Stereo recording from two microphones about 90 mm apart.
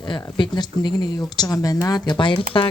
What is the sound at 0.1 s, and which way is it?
Speech, 60° left (ahead or behind).